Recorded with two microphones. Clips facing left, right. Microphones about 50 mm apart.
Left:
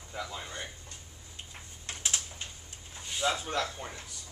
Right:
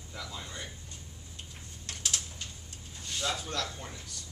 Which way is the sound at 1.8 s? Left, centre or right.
Left.